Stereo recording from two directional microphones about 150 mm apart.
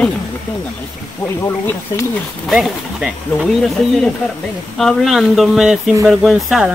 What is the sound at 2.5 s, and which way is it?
Speech, centre (ahead or behind).